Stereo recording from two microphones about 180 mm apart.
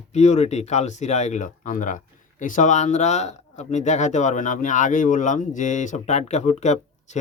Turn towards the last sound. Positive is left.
turn(degrees=40)  # may be behind; listen again after turning